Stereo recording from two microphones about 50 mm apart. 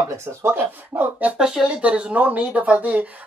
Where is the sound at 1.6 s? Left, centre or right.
Right.